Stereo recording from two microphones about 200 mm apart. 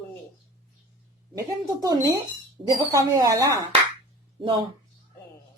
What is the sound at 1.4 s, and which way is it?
A woman's voice, 20° right (ahead or behind).